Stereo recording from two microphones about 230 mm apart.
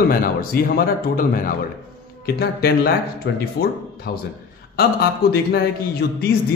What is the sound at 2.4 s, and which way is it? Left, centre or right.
Speech, left.